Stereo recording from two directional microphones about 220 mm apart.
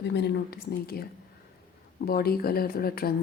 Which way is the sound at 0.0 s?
50° left (ahead or behind).